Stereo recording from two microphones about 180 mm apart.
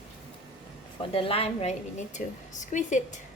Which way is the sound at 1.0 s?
30° left (ahead or behind).